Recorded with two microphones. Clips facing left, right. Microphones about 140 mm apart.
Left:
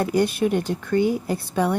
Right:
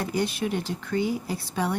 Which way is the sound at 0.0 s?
55° left (ahead or behind).